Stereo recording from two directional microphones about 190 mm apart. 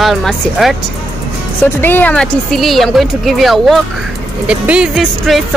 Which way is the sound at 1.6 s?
10° left (ahead or behind).